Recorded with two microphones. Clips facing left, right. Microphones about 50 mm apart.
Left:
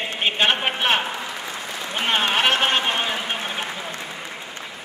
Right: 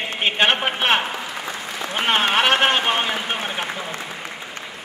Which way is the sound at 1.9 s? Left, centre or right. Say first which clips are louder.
Right 2 dB; centre.